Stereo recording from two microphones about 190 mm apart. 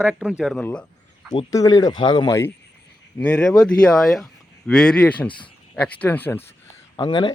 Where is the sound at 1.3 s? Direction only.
20° left (ahead or behind).